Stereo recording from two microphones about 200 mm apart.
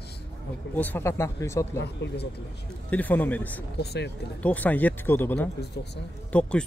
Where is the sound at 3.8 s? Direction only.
55° left (ahead or behind).